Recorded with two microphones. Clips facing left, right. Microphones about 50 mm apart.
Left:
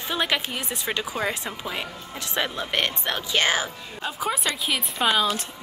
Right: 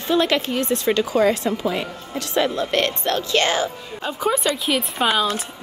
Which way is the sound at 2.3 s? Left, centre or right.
Centre.